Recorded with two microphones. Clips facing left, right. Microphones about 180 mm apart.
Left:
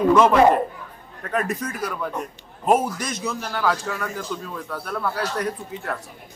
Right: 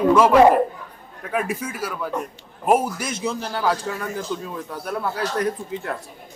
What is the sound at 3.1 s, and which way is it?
A man's voice, 25° right (ahead or behind).